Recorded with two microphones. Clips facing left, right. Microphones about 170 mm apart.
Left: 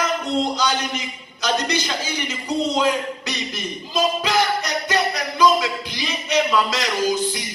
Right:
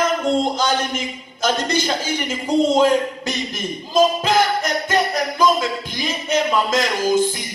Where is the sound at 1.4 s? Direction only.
50° right (ahead or behind).